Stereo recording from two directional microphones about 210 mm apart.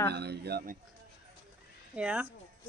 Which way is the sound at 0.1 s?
50° right (ahead or behind).